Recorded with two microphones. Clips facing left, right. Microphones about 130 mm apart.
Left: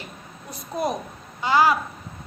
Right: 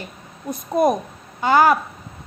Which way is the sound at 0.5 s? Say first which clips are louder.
Right 8 dB; 50° right (ahead or behind).